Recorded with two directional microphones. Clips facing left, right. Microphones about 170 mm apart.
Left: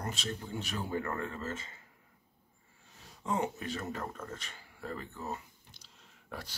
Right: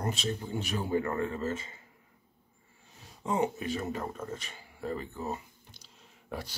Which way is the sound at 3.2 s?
15° right (ahead or behind).